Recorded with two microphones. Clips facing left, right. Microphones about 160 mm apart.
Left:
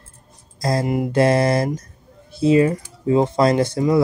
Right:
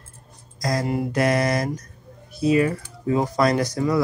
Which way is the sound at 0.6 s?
30° left (ahead or behind).